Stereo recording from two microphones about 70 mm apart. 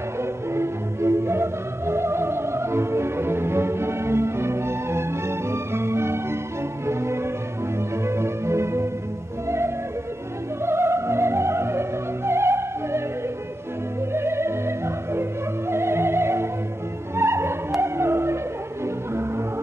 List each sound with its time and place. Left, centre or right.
0.2 s music: right
5.5 s organ: right
6.9 s music: right
10.6 s music: right
14.1 s music: right
15.7 s music: right